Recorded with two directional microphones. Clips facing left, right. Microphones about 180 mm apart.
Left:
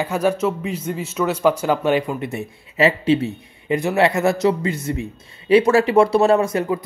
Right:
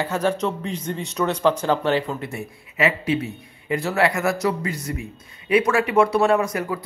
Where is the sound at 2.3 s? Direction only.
25° left (ahead or behind).